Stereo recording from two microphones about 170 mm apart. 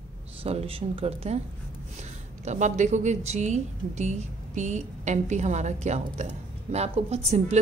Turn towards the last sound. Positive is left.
turn(degrees=-40)  # may be behind; listen again after turning